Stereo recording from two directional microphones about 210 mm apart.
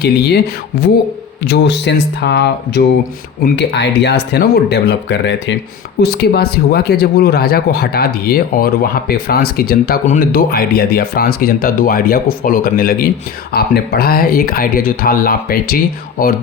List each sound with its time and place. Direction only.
0.0 s speech: 50° left (ahead or behind)